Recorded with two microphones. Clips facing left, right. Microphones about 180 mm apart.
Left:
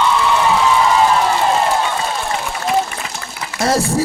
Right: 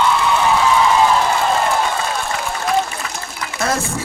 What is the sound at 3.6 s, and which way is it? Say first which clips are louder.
Speech: left 6 dB; 35° left (ahead or behind).